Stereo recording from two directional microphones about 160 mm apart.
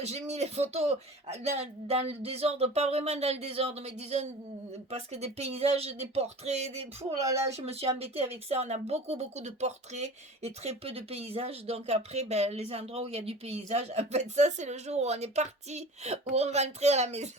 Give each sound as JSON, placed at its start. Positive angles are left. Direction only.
{"t": 0.0, "sound": "speech", "side_deg": -45}
{"t": 7.0, "sound": "speech", "side_deg": -20}
{"t": 7.5, "sound": "speech", "side_deg": -40}